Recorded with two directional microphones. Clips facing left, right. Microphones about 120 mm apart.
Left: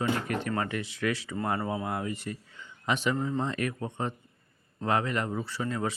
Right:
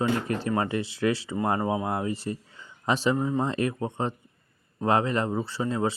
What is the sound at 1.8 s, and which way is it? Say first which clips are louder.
Speech: right 4 dB; 30° right (ahead or behind).